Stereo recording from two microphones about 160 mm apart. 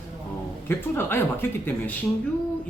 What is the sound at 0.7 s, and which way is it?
Speech, 15° left (ahead or behind).